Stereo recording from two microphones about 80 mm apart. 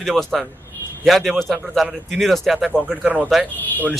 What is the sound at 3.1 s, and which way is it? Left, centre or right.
Speech, centre.